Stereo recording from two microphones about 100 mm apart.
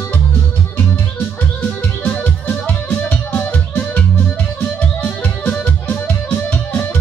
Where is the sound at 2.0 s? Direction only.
15° left (ahead or behind).